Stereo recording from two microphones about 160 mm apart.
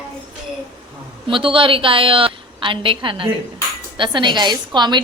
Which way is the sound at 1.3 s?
35° right (ahead or behind).